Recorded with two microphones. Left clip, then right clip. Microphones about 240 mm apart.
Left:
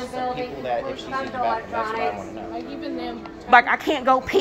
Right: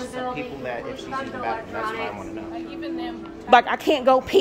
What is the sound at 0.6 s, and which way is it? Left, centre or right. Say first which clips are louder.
A woman's voice: left 7 dB; centre.